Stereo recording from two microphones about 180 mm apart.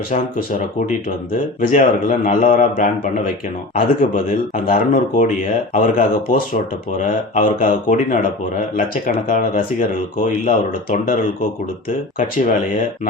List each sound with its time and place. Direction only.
1.6 s speech: 45° left (ahead or behind)